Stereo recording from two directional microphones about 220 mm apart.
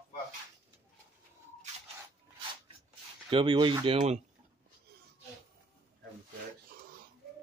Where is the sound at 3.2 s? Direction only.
25° right (ahead or behind).